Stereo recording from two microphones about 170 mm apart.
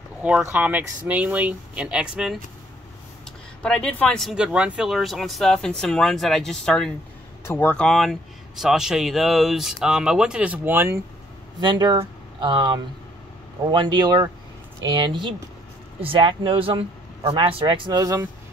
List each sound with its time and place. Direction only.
0.2 s speech: 10° right (ahead or behind)
11.6 s speech: 25° right (ahead or behind)